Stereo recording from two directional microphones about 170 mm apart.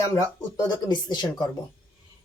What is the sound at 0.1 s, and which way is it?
Speech, 20° left (ahead or behind).